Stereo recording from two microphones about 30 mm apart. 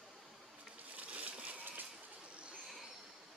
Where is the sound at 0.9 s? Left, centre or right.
Right.